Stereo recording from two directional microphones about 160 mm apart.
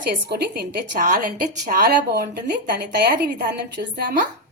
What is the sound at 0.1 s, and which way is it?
A woman's voice, 85° right.